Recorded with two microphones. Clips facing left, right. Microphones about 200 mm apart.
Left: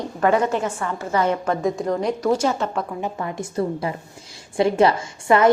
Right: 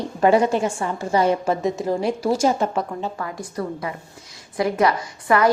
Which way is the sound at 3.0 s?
20° left (ahead or behind).